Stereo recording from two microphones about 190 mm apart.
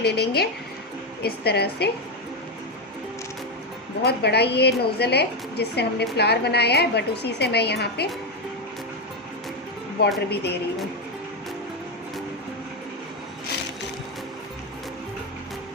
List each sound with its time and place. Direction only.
0.0 s a woman's voice: 60° left (ahead or behind)
4.0 s a woman's voice: 60° left (ahead or behind)
10.2 s a woman's voice: 60° left (ahead or behind)